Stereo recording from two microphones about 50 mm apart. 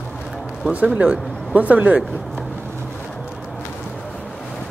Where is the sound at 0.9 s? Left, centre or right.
Right.